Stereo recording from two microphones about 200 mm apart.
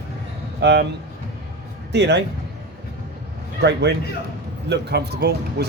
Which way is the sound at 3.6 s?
60° right (ahead or behind).